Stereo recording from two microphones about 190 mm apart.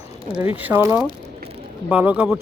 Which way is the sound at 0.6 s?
10° right (ahead or behind).